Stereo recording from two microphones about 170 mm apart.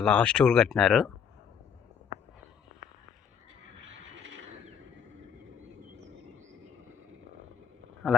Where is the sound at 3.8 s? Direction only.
90° right.